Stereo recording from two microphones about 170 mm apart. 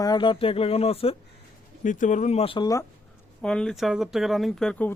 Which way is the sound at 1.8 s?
50° left (ahead or behind).